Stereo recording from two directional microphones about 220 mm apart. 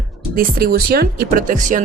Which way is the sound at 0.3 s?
45° right (ahead or behind).